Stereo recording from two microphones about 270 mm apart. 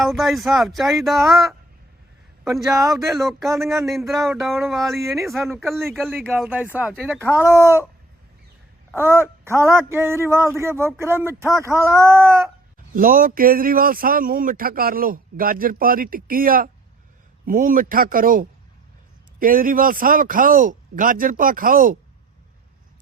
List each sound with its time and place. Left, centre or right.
0.0 s a man's voice: centre
9.0 s speech: centre
12.9 s a man's voice: right